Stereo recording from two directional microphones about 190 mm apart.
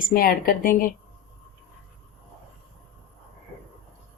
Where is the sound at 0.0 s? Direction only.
50° left (ahead or behind).